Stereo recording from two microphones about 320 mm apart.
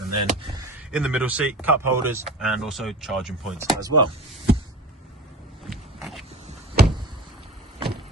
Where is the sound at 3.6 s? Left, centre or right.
Centre.